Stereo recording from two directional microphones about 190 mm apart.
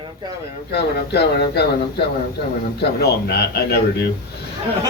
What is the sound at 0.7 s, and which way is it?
A man's voice, 60° left (ahead or behind).